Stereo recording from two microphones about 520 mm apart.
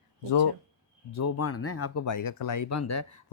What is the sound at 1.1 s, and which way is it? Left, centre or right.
Speech, left.